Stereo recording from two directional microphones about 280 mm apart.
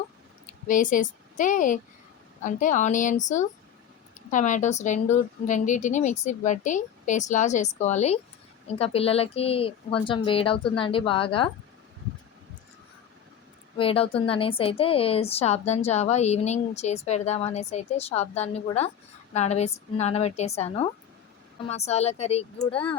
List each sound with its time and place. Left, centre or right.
0.7 s a woman's voice: left
13.7 s a woman's voice: centre